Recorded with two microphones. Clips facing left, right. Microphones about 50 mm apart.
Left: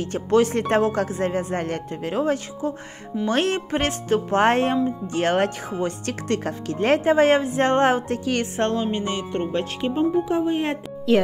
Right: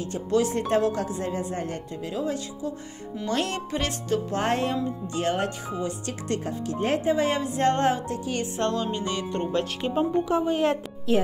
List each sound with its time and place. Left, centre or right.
0.0 s speech: left
1.6 s speech: left
3.3 s speech: left
5.1 s speech: left
7.1 s speech: left
7.4 s speech: left
8.1 s speech: left
8.7 s speech: left
9.9 s speech: centre